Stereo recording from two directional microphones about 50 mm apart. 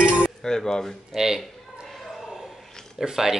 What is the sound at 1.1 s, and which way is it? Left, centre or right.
Speech, centre.